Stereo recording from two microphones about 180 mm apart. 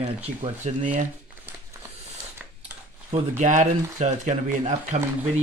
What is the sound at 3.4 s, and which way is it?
Speech, 40° right (ahead or behind).